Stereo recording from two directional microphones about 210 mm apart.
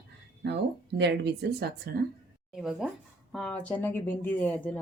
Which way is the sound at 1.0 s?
55° right (ahead or behind).